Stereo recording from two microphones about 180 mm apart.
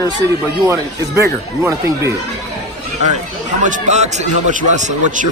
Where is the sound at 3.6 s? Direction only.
40° right (ahead or behind).